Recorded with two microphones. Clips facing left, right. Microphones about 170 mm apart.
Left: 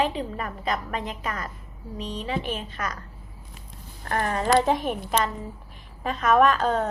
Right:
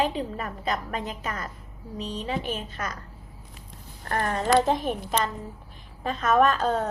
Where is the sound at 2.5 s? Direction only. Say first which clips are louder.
Left 1 dB; 40° right (ahead or behind).